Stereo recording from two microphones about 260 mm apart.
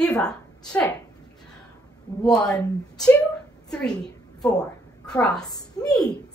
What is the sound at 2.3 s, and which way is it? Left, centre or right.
Speech, centre.